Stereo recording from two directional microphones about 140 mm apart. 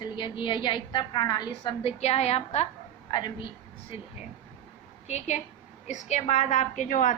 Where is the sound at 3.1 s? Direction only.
35° left (ahead or behind).